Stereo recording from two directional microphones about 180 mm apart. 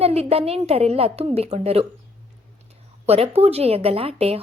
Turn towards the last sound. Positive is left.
turn(degrees=-35)  # may be behind; listen again after turning